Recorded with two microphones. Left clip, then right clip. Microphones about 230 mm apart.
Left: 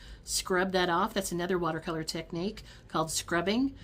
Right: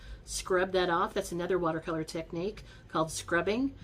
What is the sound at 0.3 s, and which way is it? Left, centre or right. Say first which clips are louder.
Speech: even; left.